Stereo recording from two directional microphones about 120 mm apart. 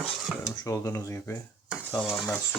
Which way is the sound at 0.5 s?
25° left (ahead or behind).